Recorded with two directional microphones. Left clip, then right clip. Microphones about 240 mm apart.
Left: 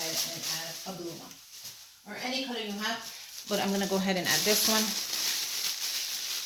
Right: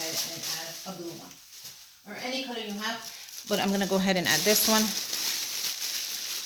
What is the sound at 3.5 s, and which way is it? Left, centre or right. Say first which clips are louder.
Speech: right 2 dB; right.